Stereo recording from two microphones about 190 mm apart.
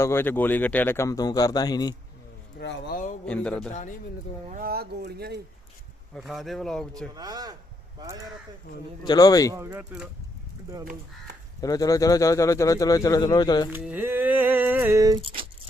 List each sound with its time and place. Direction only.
0.0 s speech: 10° left (ahead or behind)
2.6 s speech: 60° left (ahead or behind)
3.2 s speech: 5° left (ahead or behind)
3.7 s speech: 40° left (ahead or behind)
4.4 s speech: 50° right (ahead or behind)
6.1 s speech: centre (ahead or behind)
7.1 s speech: 20° right (ahead or behind)
9.0 s speech: 20° left (ahead or behind)
9.5 s a sound: 15° right (ahead or behind)
11.6 s speech: 20° left (ahead or behind)
13.7 s a sound: 10° right (ahead or behind)